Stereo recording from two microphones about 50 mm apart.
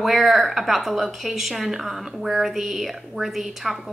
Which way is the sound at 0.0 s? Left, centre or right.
Centre.